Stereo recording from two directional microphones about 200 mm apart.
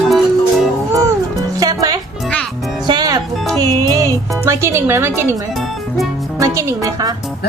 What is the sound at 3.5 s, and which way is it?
Speech, 20° right (ahead or behind).